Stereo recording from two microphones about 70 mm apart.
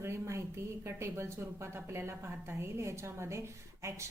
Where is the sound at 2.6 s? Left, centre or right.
Right.